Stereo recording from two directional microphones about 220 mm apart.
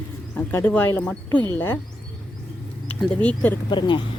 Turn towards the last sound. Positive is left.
turn(degrees=20)  # may be behind; listen again after turning